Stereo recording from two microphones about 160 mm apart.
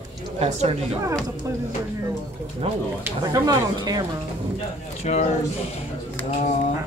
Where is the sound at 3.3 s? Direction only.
25° right (ahead or behind).